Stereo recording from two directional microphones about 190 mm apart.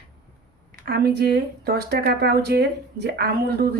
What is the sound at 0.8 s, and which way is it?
Speech, 55° right (ahead or behind).